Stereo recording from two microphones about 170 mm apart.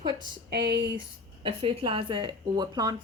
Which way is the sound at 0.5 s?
65° right (ahead or behind).